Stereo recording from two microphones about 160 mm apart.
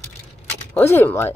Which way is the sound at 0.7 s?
15° left (ahead or behind).